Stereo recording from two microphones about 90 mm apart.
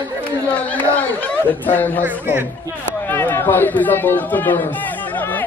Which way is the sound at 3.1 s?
30° left (ahead or behind).